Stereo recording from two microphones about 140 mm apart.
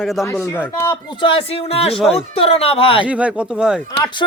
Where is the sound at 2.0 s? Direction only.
5° left (ahead or behind).